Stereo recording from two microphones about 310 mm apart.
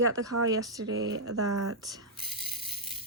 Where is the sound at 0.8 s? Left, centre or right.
Right.